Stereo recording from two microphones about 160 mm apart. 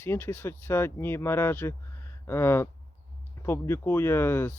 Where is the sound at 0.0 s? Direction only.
15° left (ahead or behind).